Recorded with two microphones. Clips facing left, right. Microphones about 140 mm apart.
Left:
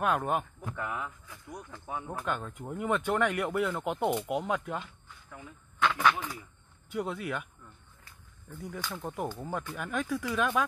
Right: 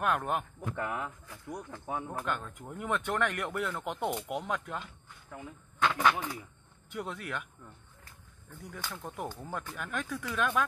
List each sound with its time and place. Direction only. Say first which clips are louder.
0.0 s speech: left 2 dB; 5° left (ahead or behind)
0.7 s speech: right 1 dB; 45° right (ahead or behind)
2.2 s speech: left 2 dB; 5° left (ahead or behind)
5.3 s speech: right 3 dB; 15° right (ahead or behind)
6.9 s speech: left 4 dB; 5° left (ahead or behind)
8.6 s speech: left 4 dB; 5° left (ahead or behind)